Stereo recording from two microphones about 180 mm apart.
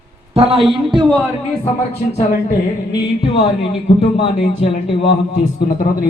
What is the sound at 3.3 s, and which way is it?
A man's voice, 30° left (ahead or behind).